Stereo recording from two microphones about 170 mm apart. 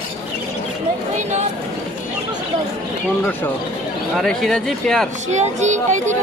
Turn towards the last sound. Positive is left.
turn(degrees=-45)  # may be behind; listen again after turning